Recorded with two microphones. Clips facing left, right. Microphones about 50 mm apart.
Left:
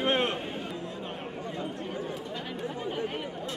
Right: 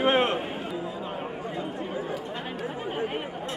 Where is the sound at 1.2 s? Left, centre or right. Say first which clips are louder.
Right 3 dB; centre.